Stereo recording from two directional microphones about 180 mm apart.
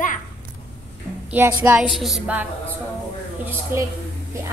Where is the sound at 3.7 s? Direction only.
15° right (ahead or behind).